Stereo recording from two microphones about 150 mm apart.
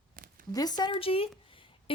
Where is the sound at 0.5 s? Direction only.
25° left (ahead or behind).